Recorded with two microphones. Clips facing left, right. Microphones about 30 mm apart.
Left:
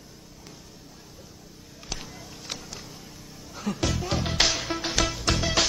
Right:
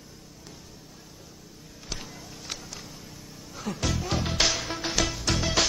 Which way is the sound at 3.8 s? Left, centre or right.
Centre.